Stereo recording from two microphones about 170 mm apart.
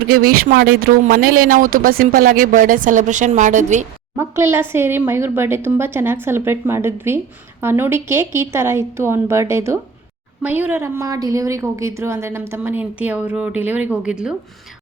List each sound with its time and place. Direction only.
0.1 s speech: 60° right (ahead or behind)
4.2 s a woman's voice: 15° right (ahead or behind)